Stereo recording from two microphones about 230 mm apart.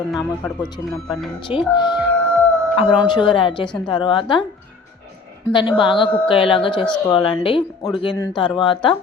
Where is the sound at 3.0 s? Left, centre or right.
Left.